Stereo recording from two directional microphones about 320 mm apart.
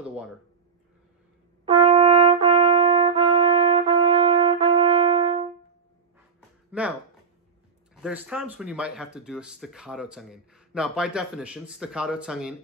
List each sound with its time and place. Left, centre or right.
1.7 s brass instrument: centre
6.7 s a sound: centre
7.9 s speech: centre